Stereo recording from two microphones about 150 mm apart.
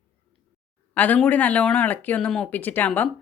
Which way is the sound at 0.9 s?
10° left (ahead or behind).